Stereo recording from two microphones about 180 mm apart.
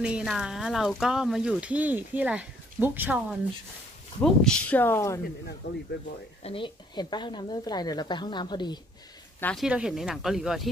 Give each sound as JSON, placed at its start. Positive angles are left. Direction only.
{"t": 0.0, "sound": "speech", "side_deg": -5}
{"t": 4.2, "sound": "speech", "side_deg": 5}
{"t": 5.6, "sound": "speech", "side_deg": 65}
{"t": 6.4, "sound": "speech", "side_deg": 30}
{"t": 9.4, "sound": "speech", "side_deg": 5}
{"t": 9.7, "sound": "speech", "side_deg": -5}